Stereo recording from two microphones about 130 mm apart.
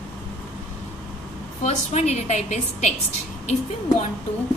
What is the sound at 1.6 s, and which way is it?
A woman's voice, 60° left (ahead or behind).